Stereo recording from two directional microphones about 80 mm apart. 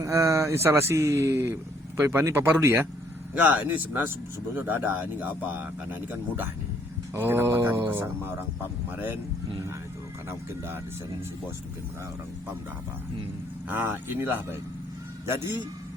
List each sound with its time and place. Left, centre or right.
0.0 s speech: right
3.4 s speech: centre
13.7 s speech: right